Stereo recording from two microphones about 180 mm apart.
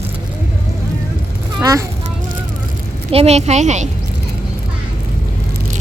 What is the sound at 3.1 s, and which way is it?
Speech, 35° right (ahead or behind).